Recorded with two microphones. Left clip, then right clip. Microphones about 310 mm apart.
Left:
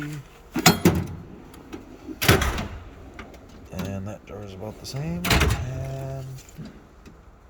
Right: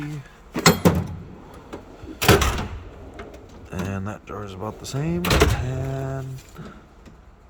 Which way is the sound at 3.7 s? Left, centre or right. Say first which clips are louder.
Right 3 dB; centre.